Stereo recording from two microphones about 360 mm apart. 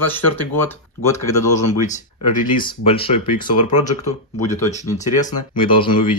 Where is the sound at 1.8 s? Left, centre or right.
Left.